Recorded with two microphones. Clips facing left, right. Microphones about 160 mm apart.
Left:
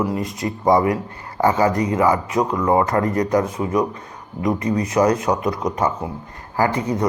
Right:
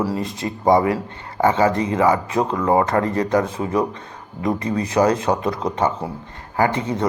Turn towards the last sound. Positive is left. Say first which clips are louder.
# even
turn(degrees=-25)  # may be behind; listen again after turning